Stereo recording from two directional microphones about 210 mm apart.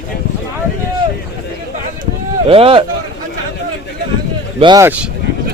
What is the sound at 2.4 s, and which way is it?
Speech, 25° right (ahead or behind).